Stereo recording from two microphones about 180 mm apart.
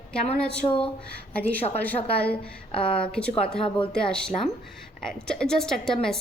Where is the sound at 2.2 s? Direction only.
5° left (ahead or behind).